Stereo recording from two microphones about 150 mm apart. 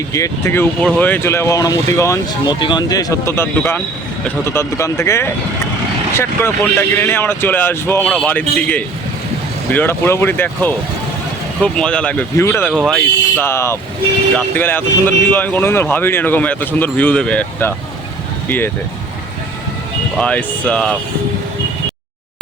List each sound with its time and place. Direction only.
0.1 s speech: 20° left (ahead or behind)
12.7 s speech: centre (ahead or behind)
13.4 s speech: 15° left (ahead or behind)
20.1 s speech: 5° left (ahead or behind)